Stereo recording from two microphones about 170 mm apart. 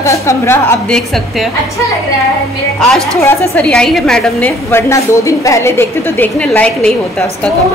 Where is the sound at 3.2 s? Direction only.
10° left (ahead or behind).